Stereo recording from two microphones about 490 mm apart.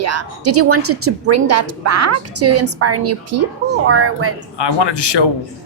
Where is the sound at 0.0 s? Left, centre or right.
Right.